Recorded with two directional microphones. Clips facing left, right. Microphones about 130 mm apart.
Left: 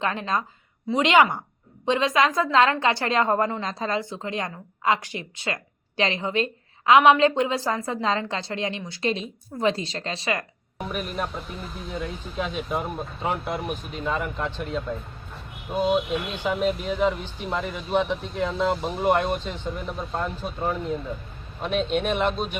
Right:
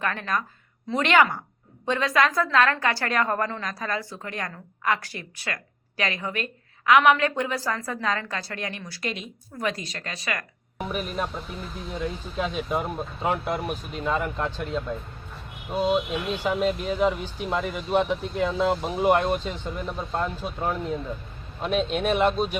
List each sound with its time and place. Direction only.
0.0 s a woman's voice: 20° left (ahead or behind)
10.8 s speech: centre (ahead or behind)